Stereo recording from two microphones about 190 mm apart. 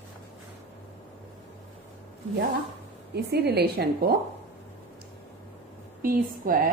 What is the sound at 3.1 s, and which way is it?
A woman's voice, 60° right (ahead or behind).